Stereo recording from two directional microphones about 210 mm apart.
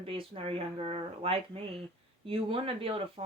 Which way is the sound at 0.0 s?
25° right (ahead or behind).